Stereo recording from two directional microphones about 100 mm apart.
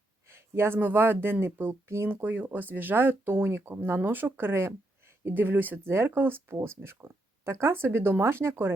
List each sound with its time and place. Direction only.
0.3 s speech: 25° right (ahead or behind)